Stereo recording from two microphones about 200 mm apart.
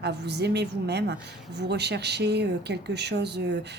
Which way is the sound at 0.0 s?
55° right (ahead or behind).